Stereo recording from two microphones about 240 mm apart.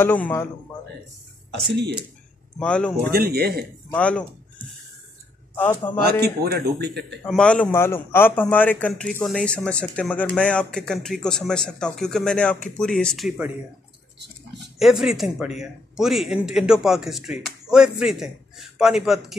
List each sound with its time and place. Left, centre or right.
0.0 s a man's voice: centre
2.6 s speech: centre
3.0 s speech: right
3.9 s speech: centre
5.9 s speech: centre
6.4 s speech: right
7.2 s a man's voice: centre
14.8 s speech: centre